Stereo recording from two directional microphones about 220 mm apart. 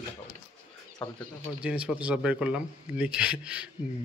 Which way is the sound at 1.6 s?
5° right (ahead or behind).